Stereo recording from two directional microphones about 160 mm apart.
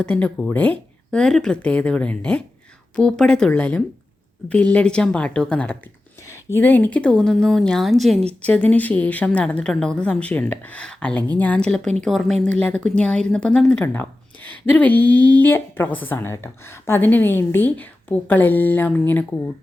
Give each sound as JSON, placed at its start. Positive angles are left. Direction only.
{"t": 0.0, "sound": "a woman's voice", "side_deg": 10}